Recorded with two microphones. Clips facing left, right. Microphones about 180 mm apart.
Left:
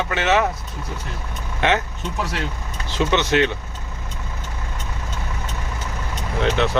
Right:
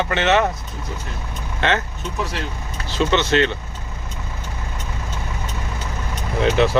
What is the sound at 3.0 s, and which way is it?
Speech, 15° left (ahead or behind).